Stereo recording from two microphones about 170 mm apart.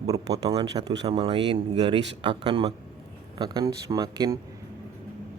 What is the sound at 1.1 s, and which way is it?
A man's voice, 30° right (ahead or behind).